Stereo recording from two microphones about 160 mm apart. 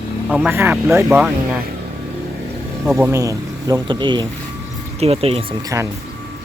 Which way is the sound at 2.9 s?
15° right (ahead or behind).